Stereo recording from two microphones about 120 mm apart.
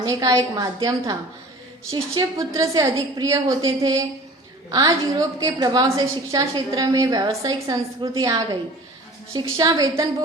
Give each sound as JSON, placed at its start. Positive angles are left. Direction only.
{"t": 0.0, "sound": "a woman's voice", "side_deg": -30}
{"t": 4.7, "sound": "a woman's voice", "side_deg": -35}